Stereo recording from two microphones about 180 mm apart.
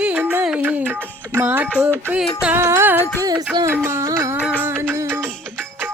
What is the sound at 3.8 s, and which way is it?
Music, 15° right (ahead or behind).